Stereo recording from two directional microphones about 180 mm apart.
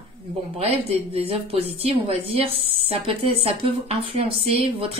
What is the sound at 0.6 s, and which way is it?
A woman's voice, 35° right (ahead or behind).